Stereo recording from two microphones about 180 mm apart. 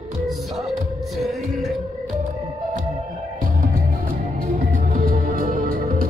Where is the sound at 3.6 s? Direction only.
50° right (ahead or behind).